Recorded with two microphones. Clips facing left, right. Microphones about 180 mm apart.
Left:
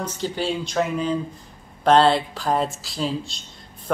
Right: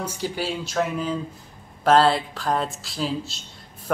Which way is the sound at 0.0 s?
10° right (ahead or behind).